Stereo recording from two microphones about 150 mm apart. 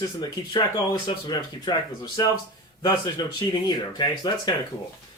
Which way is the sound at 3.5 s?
30° left (ahead or behind).